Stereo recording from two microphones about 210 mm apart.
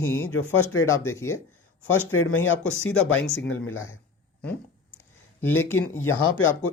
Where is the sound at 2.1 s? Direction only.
90° left.